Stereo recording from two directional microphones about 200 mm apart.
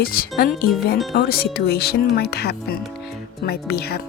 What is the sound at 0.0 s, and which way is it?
Speech, 50° left (ahead or behind).